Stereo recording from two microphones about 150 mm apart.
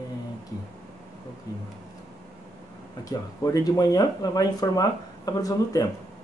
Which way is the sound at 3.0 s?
25° left (ahead or behind).